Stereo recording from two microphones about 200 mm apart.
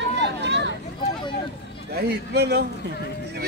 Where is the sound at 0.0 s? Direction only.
60° right (ahead or behind).